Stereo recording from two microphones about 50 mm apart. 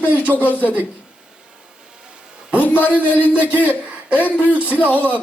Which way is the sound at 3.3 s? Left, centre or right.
Right.